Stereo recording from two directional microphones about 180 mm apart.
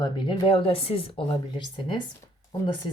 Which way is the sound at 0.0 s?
30° left (ahead or behind).